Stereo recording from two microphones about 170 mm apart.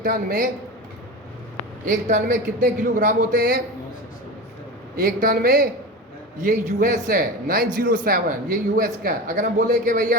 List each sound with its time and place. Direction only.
0.0 s a man's voice: 55° right (ahead or behind)
1.9 s a man's voice: 45° right (ahead or behind)
5.0 s speech: 60° right (ahead or behind)